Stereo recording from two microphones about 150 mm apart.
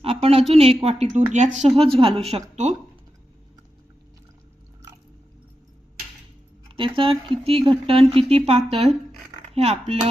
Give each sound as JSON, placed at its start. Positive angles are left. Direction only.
{"t": 0.0, "sound": "a sound", "side_deg": -40}
{"t": 0.5, "sound": "a woman's voice", "side_deg": -40}
{"t": 6.7, "sound": "a woman's voice", "side_deg": -35}